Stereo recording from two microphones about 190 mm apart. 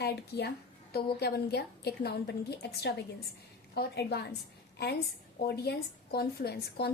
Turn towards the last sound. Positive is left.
turn(degrees=55)  # may be behind; listen again after turning